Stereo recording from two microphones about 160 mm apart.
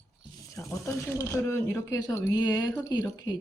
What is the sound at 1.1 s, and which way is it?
Speech, 20° left (ahead or behind).